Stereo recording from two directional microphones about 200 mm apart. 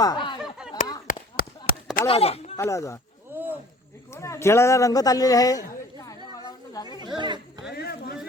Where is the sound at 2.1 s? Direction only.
30° left (ahead or behind).